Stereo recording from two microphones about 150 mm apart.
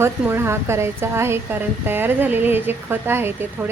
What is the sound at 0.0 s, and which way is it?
Speech, 15° right (ahead or behind).